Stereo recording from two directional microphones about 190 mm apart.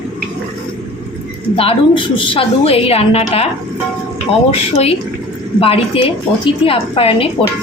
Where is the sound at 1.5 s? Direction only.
30° left (ahead or behind).